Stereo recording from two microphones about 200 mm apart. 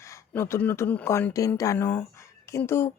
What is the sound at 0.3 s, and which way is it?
Speech, 10° left (ahead or behind).